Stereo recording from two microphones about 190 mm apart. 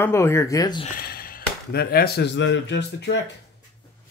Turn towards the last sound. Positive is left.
turn(degrees=60)  # may be behind; listen again after turning